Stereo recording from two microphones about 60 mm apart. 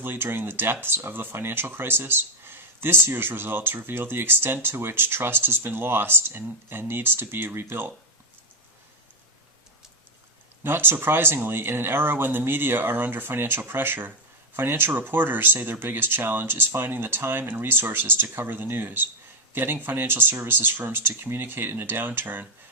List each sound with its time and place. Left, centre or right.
0.0 s speech: right
10.6 s speech: right